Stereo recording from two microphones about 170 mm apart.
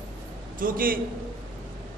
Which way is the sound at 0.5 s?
55° right (ahead or behind).